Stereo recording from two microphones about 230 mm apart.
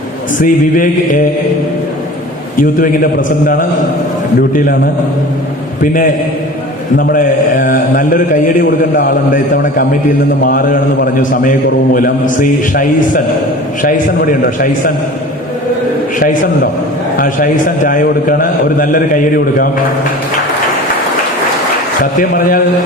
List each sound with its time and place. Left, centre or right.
0.3 s a man's voice: left
2.6 s a man's voice: left
16.2 s a man's voice: left
22.2 s a man's voice: left